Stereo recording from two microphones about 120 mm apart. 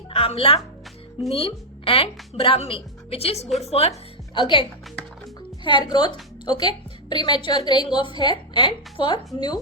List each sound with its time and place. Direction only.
0.1 s a woman's voice: 50° left (ahead or behind)
4.4 s a woman's voice: 40° left (ahead or behind)
5.6 s a woman's voice: 40° left (ahead or behind)